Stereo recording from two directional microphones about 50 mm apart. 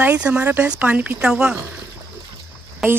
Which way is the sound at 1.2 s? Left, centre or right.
Centre.